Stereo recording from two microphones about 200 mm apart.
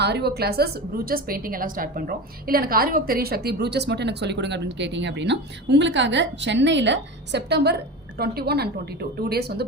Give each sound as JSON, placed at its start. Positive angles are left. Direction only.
{"t": 0.0, "sound": "a woman's voice", "side_deg": -55}